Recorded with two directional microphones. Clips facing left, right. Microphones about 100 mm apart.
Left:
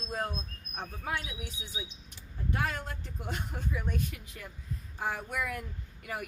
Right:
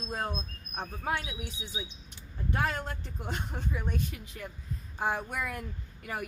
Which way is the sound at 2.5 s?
30° right (ahead or behind).